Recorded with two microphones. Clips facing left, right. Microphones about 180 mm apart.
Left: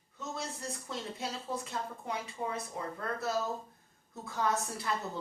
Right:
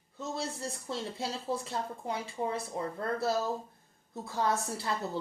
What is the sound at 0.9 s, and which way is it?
Speech, 30° right (ahead or behind).